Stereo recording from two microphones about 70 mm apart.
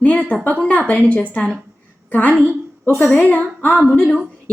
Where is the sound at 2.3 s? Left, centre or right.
Right.